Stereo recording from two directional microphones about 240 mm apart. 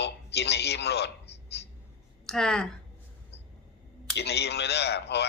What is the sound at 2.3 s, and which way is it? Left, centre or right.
Speech, centre.